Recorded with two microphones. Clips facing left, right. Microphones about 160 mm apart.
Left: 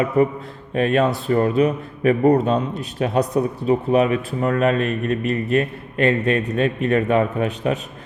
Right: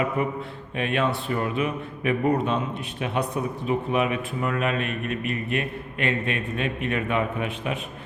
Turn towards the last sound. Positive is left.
turn(degrees=40)  # may be behind; listen again after turning